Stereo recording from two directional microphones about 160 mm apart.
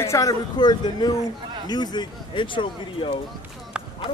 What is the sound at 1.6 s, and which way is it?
Speech, 25° left (ahead or behind).